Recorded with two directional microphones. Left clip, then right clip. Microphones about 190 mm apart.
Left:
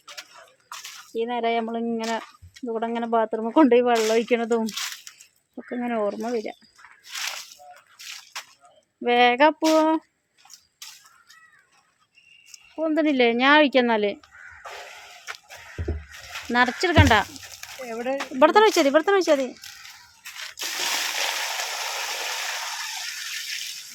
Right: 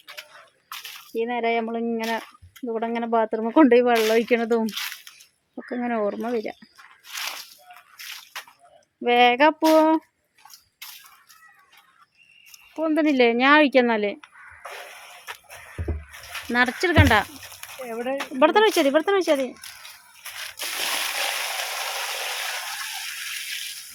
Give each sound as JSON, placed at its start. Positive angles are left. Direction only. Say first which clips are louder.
{"t": 1.1, "sound": "female singing", "louder": "right 1 dB", "side_deg": 0}
{"t": 2.6, "sound": "speech", "louder": "right 1 dB", "side_deg": -5}
{"t": 7.0, "sound": "a sound", "louder": "even", "side_deg": -5}
{"t": 7.9, "sound": "a sound", "louder": "right 1 dB", "side_deg": -15}
{"t": 9.0, "sound": "female singing", "louder": "right 1 dB", "side_deg": -5}
{"t": 12.5, "sound": "speech", "louder": "right 1 dB", "side_deg": -10}
{"t": 15.3, "sound": "music", "louder": "left 1 dB", "side_deg": 0}
{"t": 15.8, "sound": "music", "louder": "left 1 dB", "side_deg": -15}
{"t": 16.1, "sound": "speech", "louder": "even", "side_deg": -10}
{"t": 18.3, "sound": "speech", "louder": "left 1 dB", "side_deg": 5}
{"t": 19.6, "sound": "a sound", "louder": "even", "side_deg": -10}
{"t": 20.6, "sound": "water", "louder": "even", "side_deg": 0}